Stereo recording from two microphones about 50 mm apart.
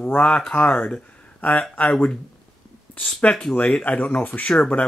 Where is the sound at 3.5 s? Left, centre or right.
Left.